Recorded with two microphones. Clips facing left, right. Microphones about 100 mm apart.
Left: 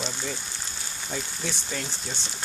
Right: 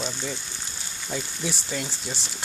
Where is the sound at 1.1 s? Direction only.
10° right (ahead or behind).